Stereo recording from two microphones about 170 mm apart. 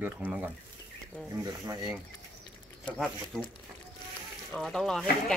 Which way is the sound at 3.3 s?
5° left (ahead or behind).